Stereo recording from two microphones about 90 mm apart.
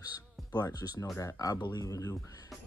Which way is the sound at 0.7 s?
45° left (ahead or behind).